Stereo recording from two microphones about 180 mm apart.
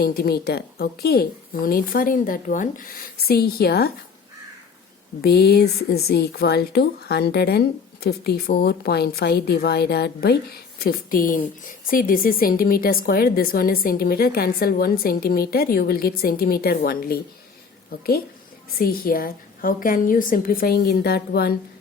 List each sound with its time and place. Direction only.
0.0 s speech: 60° left (ahead or behind)
5.2 s speech: 65° left (ahead or behind)
18.8 s speech: 55° left (ahead or behind)